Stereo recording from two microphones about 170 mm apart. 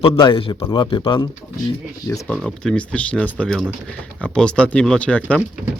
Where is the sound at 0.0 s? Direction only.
30° left (ahead or behind).